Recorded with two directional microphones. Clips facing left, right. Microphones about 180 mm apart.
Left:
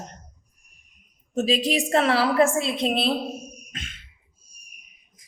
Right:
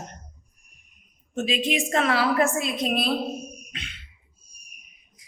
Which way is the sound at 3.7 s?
45° left (ahead or behind).